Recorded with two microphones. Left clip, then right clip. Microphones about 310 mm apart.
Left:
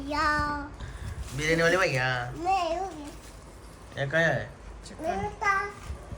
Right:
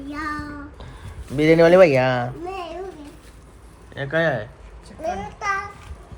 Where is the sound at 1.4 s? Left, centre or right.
Centre.